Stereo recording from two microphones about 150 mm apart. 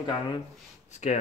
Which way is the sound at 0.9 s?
50° left (ahead or behind).